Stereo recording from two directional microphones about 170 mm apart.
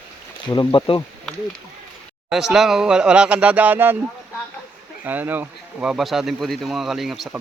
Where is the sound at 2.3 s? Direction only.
Centre (ahead or behind).